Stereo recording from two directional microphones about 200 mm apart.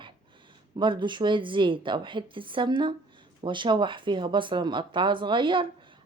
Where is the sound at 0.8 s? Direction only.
25° right (ahead or behind).